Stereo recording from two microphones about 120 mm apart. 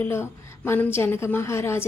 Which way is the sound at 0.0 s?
20° left (ahead or behind).